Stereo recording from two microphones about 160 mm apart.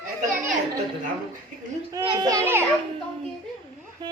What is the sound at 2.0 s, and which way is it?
Children playing, 30° right (ahead or behind).